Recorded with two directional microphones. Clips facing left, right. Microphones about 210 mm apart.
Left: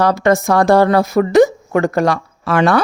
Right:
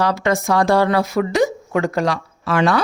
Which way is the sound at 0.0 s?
45° left (ahead or behind).